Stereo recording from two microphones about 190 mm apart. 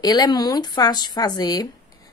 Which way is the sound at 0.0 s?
20° left (ahead or behind).